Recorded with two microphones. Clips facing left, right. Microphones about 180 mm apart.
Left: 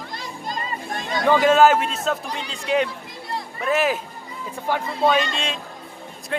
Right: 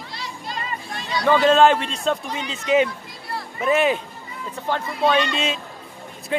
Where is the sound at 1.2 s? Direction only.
10° left (ahead or behind).